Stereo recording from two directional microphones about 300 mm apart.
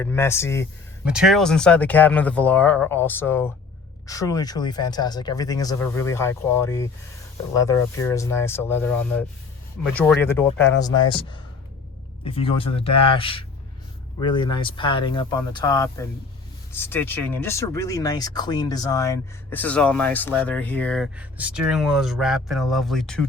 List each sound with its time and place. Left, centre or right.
0.0 s speech: centre
1.0 s speech: centre